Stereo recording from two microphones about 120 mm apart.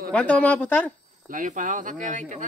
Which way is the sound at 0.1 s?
10° left (ahead or behind).